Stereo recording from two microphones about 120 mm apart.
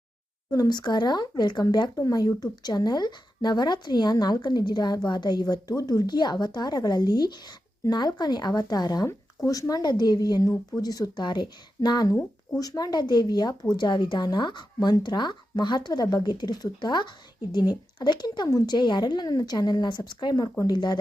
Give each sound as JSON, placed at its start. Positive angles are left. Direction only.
{"t": 0.5, "sound": "speech", "side_deg": 35}